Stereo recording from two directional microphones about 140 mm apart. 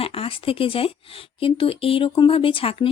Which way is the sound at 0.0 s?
45° left (ahead or behind).